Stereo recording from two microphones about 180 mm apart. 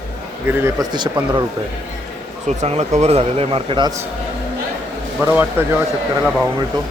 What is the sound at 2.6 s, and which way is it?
Speech, 40° right (ahead or behind).